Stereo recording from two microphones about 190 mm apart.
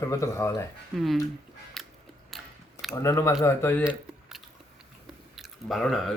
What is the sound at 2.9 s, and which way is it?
Speech, 15° left (ahead or behind).